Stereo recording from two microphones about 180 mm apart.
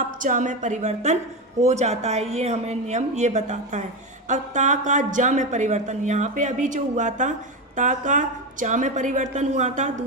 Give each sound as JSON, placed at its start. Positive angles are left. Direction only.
{"t": 0.0, "sound": "a woman's voice", "side_deg": -45}